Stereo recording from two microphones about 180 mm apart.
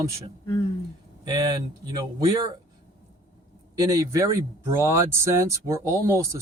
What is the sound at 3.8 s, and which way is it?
Speech, 20° right (ahead or behind).